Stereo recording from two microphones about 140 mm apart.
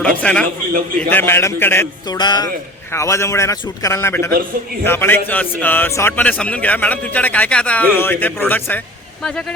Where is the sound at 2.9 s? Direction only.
20° left (ahead or behind).